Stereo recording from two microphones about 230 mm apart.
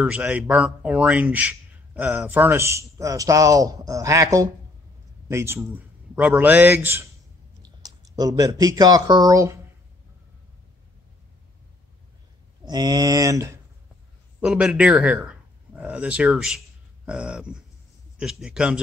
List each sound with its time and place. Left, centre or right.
0.0 s speech: centre
12.6 s speech: centre